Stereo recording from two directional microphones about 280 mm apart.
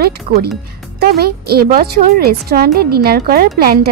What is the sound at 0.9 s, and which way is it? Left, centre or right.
Speech, right.